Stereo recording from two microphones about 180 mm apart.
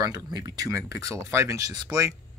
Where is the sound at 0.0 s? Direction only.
20° right (ahead or behind).